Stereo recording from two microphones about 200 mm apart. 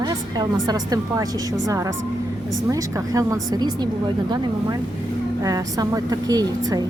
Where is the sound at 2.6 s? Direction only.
15° right (ahead or behind).